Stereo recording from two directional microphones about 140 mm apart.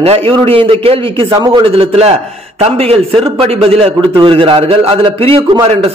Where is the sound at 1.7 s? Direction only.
45° right (ahead or behind).